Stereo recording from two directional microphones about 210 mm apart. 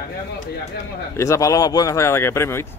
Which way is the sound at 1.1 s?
15° left (ahead or behind).